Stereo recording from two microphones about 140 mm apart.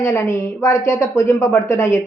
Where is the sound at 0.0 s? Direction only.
20° left (ahead or behind).